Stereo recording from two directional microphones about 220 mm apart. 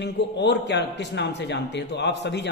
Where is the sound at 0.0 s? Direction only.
50° left (ahead or behind).